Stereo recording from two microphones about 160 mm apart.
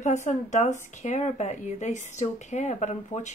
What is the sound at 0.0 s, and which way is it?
Speech, 45° left (ahead or behind).